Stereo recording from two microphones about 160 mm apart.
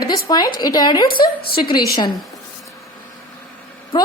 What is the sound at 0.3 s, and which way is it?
A woman's voice, 25° left (ahead or behind).